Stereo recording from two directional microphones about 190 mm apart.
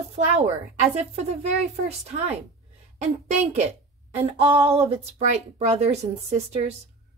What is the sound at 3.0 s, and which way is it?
Speech, 35° right (ahead or behind).